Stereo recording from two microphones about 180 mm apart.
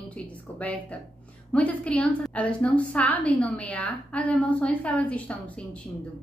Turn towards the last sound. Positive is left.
turn(degrees=5)  # may be behind; listen again after turning